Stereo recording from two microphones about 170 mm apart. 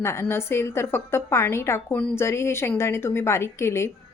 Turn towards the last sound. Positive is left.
turn(degrees=15)  # may be behind; listen again after turning